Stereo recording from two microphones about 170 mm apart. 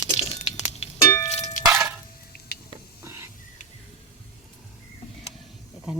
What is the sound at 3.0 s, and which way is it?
Hiss, 15° right (ahead or behind).